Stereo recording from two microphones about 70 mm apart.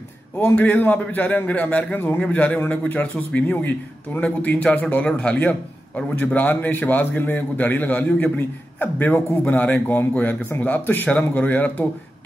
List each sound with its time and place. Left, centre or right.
0.6 s a man's voice: left